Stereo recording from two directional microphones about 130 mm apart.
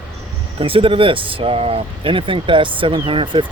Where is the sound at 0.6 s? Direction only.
45° right (ahead or behind).